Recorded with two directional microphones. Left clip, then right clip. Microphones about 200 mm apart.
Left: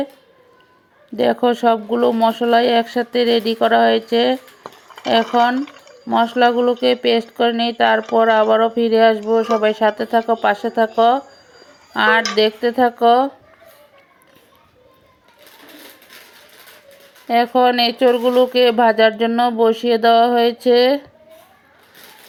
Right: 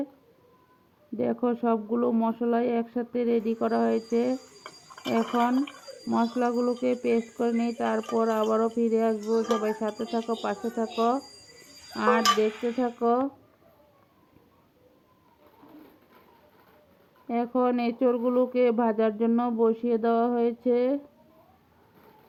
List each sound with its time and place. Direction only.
1.1 s speech: 20° left (ahead or behind)
13.1 s speech: 20° left (ahead or behind)
17.2 s speech: 20° left (ahead or behind)